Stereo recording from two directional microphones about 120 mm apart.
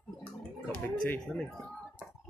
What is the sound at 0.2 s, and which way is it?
Gargling, 15° left (ahead or behind).